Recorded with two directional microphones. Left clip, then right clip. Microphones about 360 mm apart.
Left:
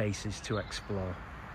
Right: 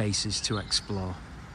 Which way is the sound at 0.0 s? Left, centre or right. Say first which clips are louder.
Right 7 dB; centre.